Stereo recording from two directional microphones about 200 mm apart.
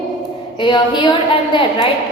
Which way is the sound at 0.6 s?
25° left (ahead or behind).